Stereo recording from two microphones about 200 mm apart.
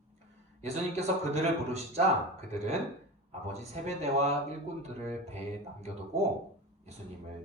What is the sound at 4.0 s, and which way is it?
Speech, 30° right (ahead or behind).